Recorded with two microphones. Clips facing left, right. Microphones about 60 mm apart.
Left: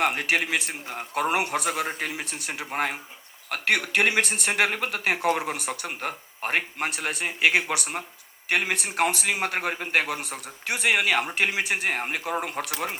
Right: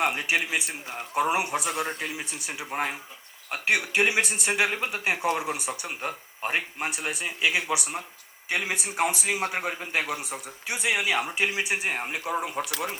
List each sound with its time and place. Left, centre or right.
0.0 s speech: left